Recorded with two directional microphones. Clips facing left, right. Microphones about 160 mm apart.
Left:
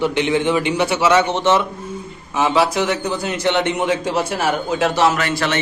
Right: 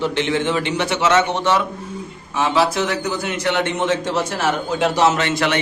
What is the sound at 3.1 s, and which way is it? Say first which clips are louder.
Speech: left 2 dB; 30° left (ahead or behind).